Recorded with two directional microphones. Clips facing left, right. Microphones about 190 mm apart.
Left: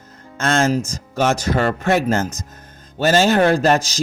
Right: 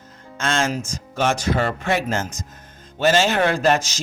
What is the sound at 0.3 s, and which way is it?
Speech, 40° left (ahead or behind).